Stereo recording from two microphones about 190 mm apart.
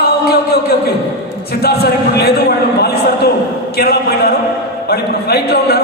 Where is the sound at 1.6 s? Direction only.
55° left (ahead or behind).